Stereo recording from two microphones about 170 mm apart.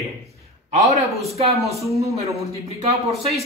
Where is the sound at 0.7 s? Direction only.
40° right (ahead or behind).